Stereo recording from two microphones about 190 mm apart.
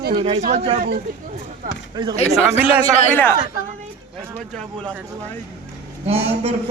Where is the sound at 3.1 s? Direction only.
10° left (ahead or behind).